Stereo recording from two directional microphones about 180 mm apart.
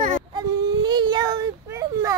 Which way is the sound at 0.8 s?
25° right (ahead or behind).